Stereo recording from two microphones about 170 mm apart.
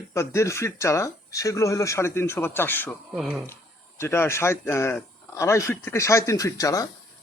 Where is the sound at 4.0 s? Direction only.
15° left (ahead or behind).